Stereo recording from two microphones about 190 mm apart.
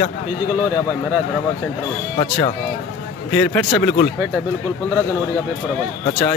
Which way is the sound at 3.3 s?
10° left (ahead or behind).